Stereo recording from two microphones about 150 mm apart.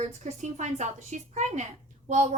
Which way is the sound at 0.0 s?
50° right (ahead or behind).